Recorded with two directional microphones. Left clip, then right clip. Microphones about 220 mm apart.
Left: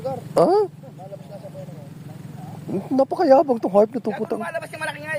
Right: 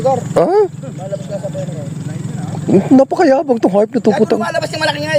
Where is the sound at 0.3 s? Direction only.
Centre (ahead or behind).